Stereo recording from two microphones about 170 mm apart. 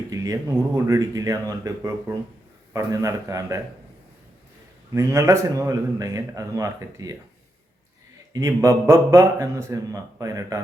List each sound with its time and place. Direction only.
0.1 s a man's voice: 20° right (ahead or behind)
4.9 s a man's voice: 20° right (ahead or behind)
8.3 s a man's voice: 20° right (ahead or behind)